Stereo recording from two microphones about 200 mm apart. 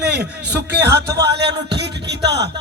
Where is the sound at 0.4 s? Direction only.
55° right (ahead or behind).